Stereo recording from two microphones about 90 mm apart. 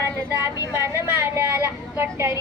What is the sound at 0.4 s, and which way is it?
Speech, 30° right (ahead or behind).